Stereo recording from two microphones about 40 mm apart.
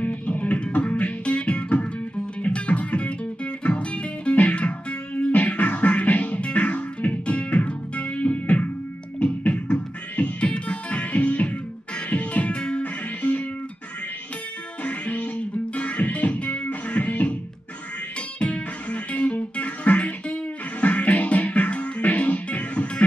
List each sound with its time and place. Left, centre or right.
0.0 s music: left
12.8 s music: left
14.8 s music: left
18.4 s music: left